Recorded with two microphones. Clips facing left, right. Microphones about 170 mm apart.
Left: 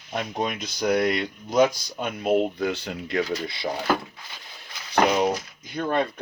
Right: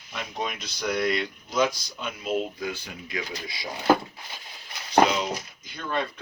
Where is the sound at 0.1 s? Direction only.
50° left (ahead or behind).